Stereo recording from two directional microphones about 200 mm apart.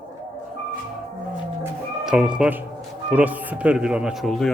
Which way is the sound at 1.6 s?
5° right (ahead or behind).